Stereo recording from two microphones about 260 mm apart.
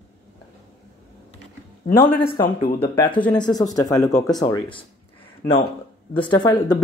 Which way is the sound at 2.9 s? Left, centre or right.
Centre.